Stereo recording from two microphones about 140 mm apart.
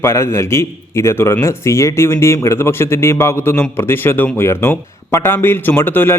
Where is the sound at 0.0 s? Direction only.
20° left (ahead or behind).